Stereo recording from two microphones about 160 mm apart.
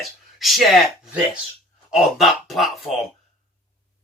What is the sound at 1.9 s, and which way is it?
Speech, centre (ahead or behind).